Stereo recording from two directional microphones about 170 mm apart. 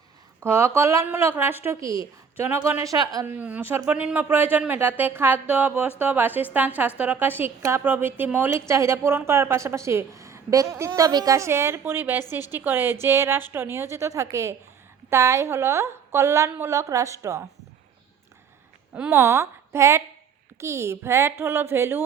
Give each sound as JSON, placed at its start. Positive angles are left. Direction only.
{"t": 0.3, "sound": "a woman's voice", "side_deg": -15}
{"t": 3.2, "sound": "a woman's voice", "side_deg": -10}
{"t": 18.9, "sound": "a woman's voice", "side_deg": -10}